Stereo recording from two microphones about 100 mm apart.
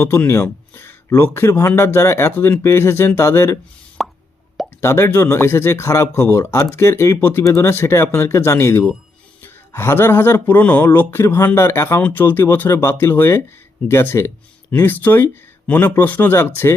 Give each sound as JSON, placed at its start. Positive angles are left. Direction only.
{"t": 0.0, "sound": "speech", "side_deg": 25}
{"t": 4.0, "sound": "plop", "side_deg": 0}
{"t": 4.8, "sound": "speech", "side_deg": 25}